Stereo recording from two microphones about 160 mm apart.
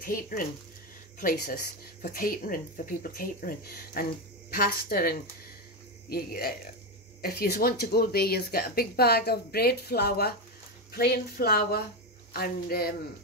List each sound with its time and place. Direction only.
0.0 s speech: 60° left (ahead or behind); by 10.3 s 85° left
10.9 s speech: 75° left (ahead or behind)